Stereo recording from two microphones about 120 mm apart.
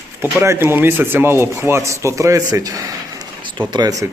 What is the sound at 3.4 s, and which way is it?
Speech, 40° right (ahead or behind).